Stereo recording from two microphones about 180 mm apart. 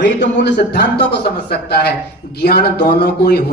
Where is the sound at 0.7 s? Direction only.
65° left (ahead or behind).